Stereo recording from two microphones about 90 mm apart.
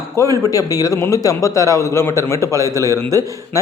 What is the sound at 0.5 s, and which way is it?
A man's voice, 40° left (ahead or behind).